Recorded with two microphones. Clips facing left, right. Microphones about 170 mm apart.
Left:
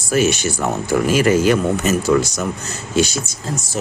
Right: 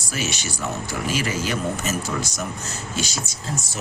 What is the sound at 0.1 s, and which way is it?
Speech, 50° left (ahead or behind).